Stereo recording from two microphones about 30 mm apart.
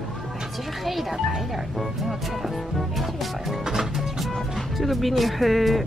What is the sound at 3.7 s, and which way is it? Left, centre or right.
Music, centre.